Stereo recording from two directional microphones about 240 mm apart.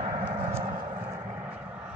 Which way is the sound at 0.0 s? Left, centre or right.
Right.